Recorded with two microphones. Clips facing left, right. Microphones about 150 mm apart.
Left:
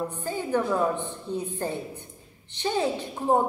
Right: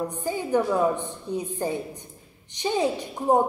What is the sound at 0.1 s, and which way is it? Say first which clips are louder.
A woman's voice: right 3 dB; 15° right (ahead or behind).